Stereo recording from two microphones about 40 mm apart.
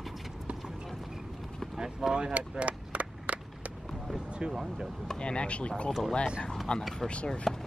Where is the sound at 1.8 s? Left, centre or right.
Centre.